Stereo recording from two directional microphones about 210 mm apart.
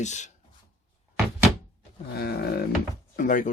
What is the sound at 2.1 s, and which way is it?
Speech, 50° left (ahead or behind).